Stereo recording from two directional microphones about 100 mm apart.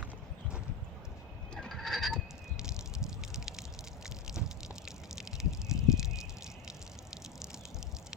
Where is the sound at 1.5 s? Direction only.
5° left (ahead or behind).